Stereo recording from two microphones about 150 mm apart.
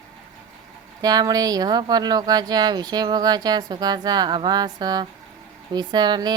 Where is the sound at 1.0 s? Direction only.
25° right (ahead or behind).